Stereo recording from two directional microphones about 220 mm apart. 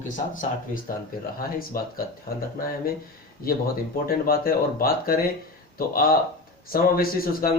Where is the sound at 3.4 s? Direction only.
40° left (ahead or behind).